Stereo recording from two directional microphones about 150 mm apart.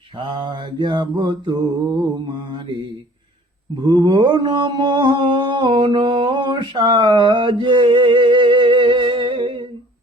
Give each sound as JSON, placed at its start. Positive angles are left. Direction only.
{"t": 0.2, "sound": "mantra", "side_deg": -30}